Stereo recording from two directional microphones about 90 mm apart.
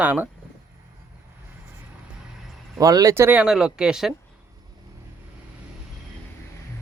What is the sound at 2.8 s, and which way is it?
Speech, 40° right (ahead or behind).